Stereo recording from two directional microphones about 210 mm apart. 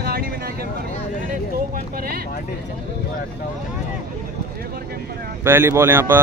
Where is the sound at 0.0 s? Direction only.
45° right (ahead or behind).